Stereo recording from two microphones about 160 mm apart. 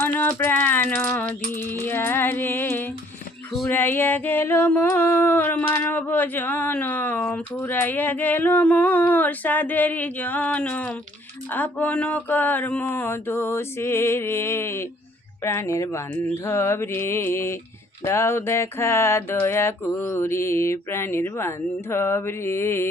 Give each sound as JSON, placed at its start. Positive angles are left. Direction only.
{"t": 0.0, "sound": "rattle", "side_deg": 15}
{"t": 1.5, "sound": "music", "side_deg": 15}
{"t": 3.7, "sound": "a sound", "side_deg": 15}